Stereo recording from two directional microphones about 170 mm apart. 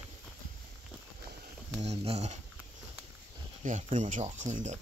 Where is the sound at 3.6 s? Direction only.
45° right (ahead or behind).